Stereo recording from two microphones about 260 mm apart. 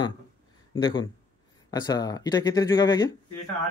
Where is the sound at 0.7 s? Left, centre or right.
Centre.